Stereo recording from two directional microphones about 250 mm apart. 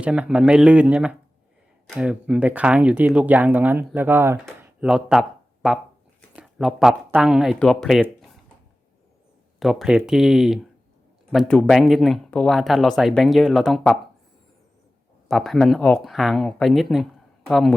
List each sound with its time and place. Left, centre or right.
0.0 s speech: centre
9.6 s speech: centre
15.3 s speech: centre